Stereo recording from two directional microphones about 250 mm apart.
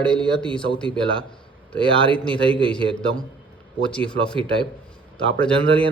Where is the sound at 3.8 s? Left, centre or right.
Centre.